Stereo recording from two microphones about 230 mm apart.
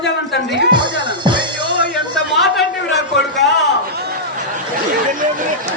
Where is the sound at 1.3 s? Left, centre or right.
Right.